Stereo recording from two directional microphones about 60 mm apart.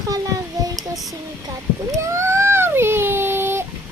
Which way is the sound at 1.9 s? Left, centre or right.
Right.